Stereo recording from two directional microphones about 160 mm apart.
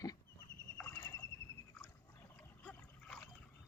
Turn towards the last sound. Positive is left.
turn(degrees=10)  # may be behind; listen again after turning